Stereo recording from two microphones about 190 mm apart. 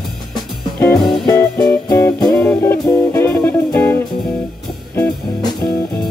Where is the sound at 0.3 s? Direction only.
5° left (ahead or behind).